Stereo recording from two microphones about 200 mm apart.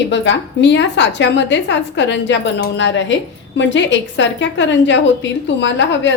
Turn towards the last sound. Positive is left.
turn(degrees=65)  # may be behind; listen again after turning